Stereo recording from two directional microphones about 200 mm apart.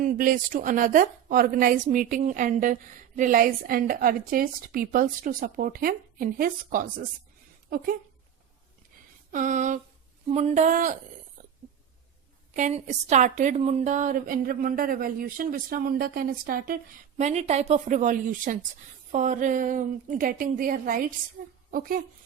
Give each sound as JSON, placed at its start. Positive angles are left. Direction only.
{"t": 0.0, "sound": "a woman's voice", "side_deg": -40}
{"t": 9.3, "sound": "a woman's voice", "side_deg": -40}
{"t": 11.4, "sound": "burping", "side_deg": -40}
{"t": 12.5, "sound": "a woman's voice", "side_deg": -35}